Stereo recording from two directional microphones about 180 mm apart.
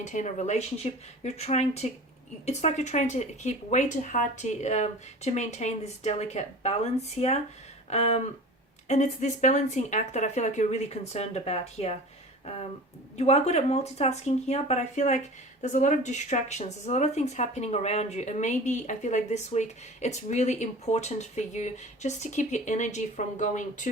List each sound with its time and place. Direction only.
0.0 s speech: 45° left (ahead or behind)
13.1 s speech: 35° left (ahead or behind)